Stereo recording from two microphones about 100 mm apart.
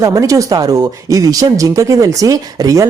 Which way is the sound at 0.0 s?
35° right (ahead or behind).